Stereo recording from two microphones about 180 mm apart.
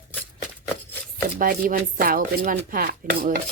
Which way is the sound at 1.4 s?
50° right (ahead or behind).